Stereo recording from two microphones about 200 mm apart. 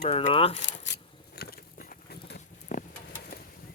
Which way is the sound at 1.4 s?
50° left (ahead or behind).